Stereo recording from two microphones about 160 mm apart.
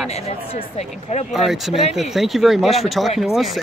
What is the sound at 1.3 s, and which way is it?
Speech, centre (ahead or behind).